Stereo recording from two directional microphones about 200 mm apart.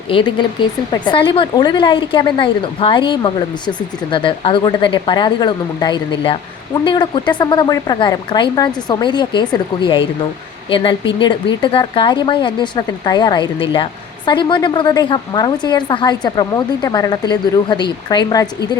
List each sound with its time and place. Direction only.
0.1 s speech: 25° left (ahead or behind)